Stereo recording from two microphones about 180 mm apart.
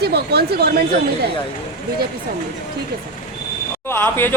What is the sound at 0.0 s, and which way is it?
Speech, 65° right (ahead or behind).